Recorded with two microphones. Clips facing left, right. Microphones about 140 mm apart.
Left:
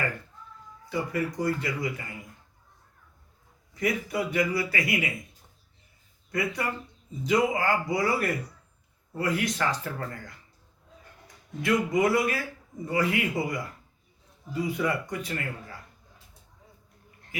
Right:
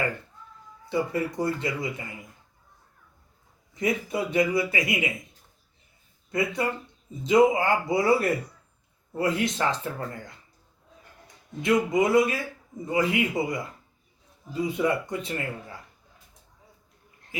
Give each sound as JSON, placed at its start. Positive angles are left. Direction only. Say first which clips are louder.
{"t": 0.9, "sound": "a man's voice", "louder": "right 3 dB", "side_deg": -25}
{"t": 3.8, "sound": "a man's voice", "louder": "right 1 dB", "side_deg": -25}
{"t": 6.3, "sound": "a man's voice", "louder": "right 3 dB", "side_deg": -25}
{"t": 11.6, "sound": "a man's voice", "louder": "right 2 dB", "side_deg": -20}